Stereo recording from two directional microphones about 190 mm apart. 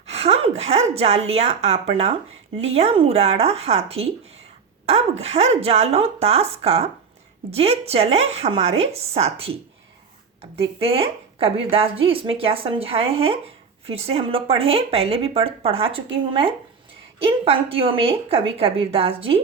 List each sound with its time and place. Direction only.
0.1 s a woman's voice: 30° right (ahead or behind)